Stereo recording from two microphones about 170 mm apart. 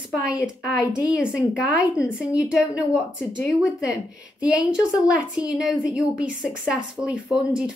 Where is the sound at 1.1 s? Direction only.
5° right (ahead or behind).